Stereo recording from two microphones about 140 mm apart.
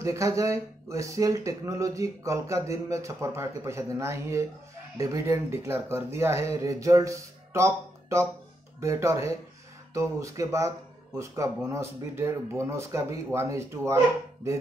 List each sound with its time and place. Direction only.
0.0 s speech: 20° right (ahead or behind)